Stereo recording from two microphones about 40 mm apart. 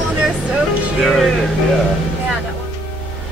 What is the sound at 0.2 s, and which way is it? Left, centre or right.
Vehicle, right.